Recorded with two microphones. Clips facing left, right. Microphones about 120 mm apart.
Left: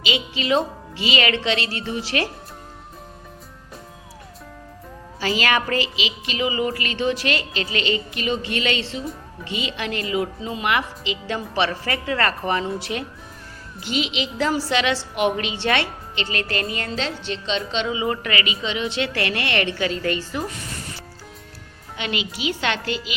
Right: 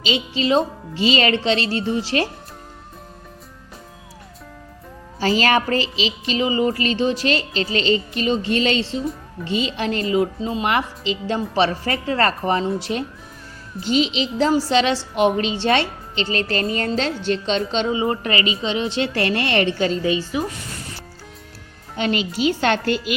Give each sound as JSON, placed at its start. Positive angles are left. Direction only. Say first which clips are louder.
{"t": 0.0, "sound": "a woman's voice", "louder": "right 4 dB", "side_deg": -30}
{"t": 5.2, "sound": "a woman's voice", "louder": "right 4 dB", "side_deg": -35}
{"t": 20.0, "sound": "a woman's voice", "louder": "right 4 dB", "side_deg": -15}
{"t": 21.9, "sound": "a woman's voice", "louder": "right 6 dB", "side_deg": -40}